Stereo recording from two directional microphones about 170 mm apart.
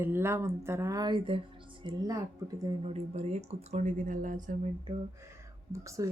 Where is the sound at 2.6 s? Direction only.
35° right (ahead or behind).